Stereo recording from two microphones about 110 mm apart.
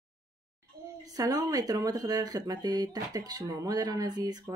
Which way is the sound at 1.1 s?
35° right (ahead or behind).